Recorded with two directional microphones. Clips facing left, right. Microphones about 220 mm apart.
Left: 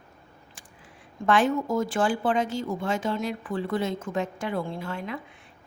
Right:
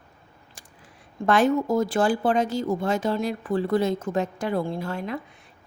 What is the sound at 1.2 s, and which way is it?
A woman's voice, 40° right (ahead or behind).